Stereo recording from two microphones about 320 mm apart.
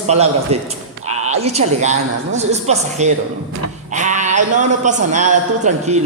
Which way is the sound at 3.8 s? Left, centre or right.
Right.